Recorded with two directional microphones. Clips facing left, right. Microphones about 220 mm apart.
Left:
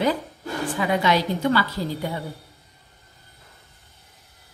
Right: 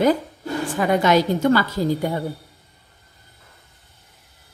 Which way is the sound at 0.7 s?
45° right (ahead or behind).